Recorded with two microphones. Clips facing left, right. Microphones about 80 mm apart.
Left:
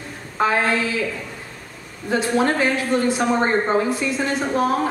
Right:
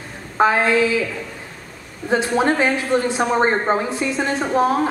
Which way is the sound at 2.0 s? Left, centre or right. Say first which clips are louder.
Right 2 dB; right.